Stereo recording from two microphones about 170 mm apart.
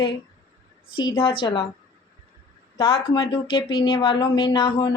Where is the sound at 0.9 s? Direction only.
30° left (ahead or behind).